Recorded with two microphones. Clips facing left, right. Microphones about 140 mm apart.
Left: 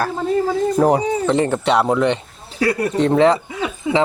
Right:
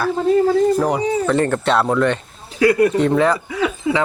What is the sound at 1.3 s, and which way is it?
Speech, 15° left (ahead or behind).